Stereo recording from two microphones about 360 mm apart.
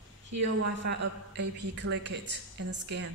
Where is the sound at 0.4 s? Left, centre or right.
Right.